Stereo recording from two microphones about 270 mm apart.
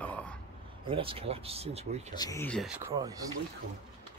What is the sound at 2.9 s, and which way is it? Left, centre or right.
Speech, centre.